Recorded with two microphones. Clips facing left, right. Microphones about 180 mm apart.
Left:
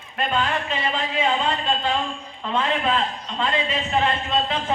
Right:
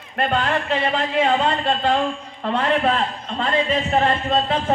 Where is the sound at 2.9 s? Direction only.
45° right (ahead or behind).